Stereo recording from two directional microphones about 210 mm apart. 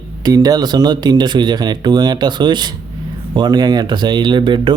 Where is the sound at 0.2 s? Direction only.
15° right (ahead or behind).